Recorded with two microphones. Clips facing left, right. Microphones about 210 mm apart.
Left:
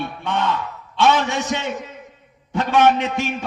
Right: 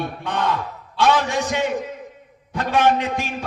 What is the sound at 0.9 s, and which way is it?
A man's voice, 25° left (ahead or behind).